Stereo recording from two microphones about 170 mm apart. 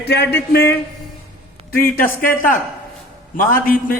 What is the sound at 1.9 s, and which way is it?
A man's voice, 55° left (ahead or behind).